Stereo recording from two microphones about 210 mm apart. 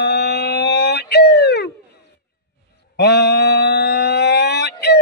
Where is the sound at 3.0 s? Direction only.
50° left (ahead or behind).